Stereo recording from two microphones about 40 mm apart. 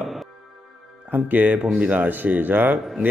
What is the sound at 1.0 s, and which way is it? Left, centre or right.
Speech, right.